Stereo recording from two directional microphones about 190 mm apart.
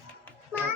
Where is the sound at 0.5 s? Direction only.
10° right (ahead or behind).